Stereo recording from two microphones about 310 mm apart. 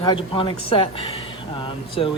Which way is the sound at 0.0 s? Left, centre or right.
Centre.